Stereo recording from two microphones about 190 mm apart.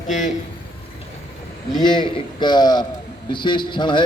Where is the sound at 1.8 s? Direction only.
25° left (ahead or behind).